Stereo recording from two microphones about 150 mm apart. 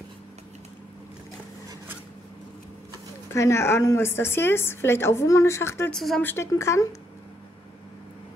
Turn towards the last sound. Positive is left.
turn(degrees=20)  # may be behind; listen again after turning